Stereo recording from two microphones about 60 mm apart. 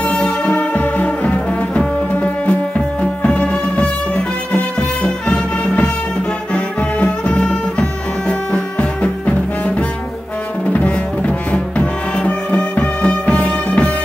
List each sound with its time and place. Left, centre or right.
0.1 s music: centre
3.0 s music: centre
10.7 s music: left